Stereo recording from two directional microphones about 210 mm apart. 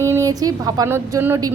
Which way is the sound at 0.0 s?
15° right (ahead or behind).